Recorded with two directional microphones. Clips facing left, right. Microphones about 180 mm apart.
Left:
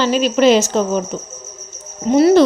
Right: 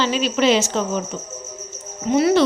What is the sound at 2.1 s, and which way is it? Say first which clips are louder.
Cricket: left 5 dB; 40° left (ahead or behind).